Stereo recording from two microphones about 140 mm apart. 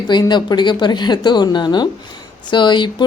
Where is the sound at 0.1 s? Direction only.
30° left (ahead or behind).